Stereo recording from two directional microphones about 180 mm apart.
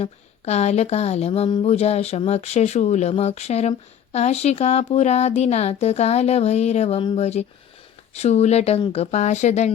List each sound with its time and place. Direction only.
0.0 s speech: 35° left (ahead or behind)